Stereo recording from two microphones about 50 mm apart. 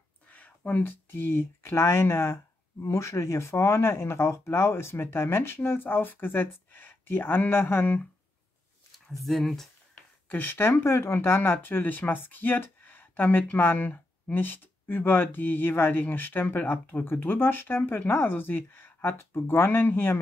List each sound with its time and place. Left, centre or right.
0.3 s a sound: left
0.8 s speech: left
9.2 s speech: centre
10.2 s speech: left
10.7 s speech: left
17.0 s speech: left